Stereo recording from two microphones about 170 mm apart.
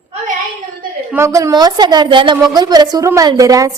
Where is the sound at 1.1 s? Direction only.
15° right (ahead or behind).